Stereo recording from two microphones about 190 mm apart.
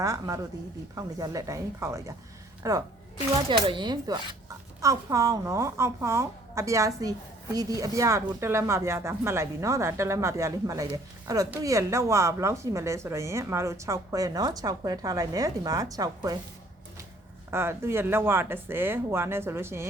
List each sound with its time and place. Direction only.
0.0 s a woman's voice: 15° right (ahead or behind)
17.5 s a woman's voice: 15° right (ahead or behind)